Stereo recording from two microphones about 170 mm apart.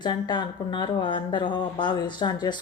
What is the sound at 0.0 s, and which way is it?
Speech, 25° left (ahead or behind).